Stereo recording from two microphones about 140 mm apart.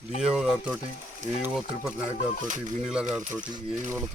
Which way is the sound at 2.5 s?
60° right (ahead or behind).